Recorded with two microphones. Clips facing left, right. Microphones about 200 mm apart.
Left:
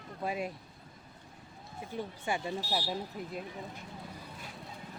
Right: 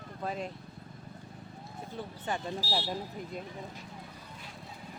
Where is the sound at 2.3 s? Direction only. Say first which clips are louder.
Even; 10° left (ahead or behind).